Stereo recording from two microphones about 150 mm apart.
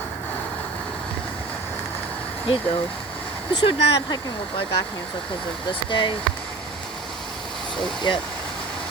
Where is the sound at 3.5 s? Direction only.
35° left (ahead or behind).